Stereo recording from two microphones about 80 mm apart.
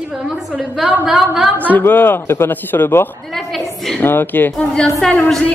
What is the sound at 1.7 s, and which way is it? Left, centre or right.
A man's voice, left.